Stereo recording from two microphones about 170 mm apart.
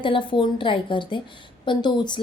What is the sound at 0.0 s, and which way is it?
Speech, 30° left (ahead or behind).